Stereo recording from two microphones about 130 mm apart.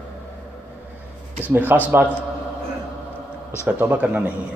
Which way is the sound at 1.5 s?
15° right (ahead or behind).